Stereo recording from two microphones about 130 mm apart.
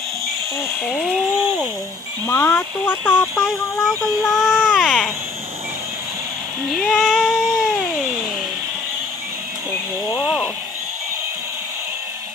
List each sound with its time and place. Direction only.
0.9 s speech: centre (ahead or behind)
2.2 s speech: 20° left (ahead or behind)
3.4 s speech: centre (ahead or behind)
4.8 s speech: 10° left (ahead or behind)
6.7 s child singing: centre (ahead or behind)
10.2 s a sound: 5° right (ahead or behind)